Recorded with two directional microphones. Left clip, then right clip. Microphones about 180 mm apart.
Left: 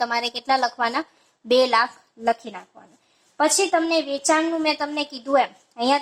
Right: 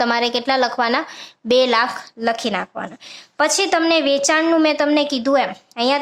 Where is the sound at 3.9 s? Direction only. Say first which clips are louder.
Right 5 dB; 35° right (ahead or behind).